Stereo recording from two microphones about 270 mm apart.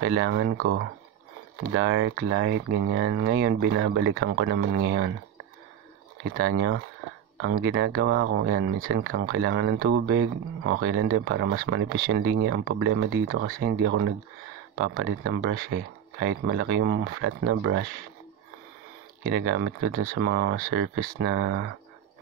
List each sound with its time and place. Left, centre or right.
0.0 s speech: right
6.3 s speech: right
19.2 s speech: right